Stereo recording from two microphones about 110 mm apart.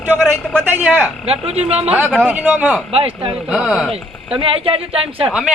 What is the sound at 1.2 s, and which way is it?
Speech, 65° right (ahead or behind).